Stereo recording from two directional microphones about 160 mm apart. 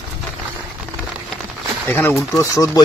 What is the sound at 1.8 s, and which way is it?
Speech, 15° left (ahead or behind).